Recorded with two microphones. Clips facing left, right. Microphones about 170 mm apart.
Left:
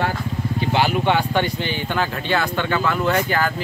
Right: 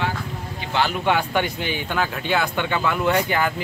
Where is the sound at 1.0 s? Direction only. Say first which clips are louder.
Left 2 dB; 5° right (ahead or behind).